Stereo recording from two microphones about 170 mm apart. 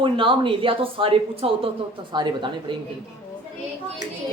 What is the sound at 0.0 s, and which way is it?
Speech, 30° right (ahead or behind).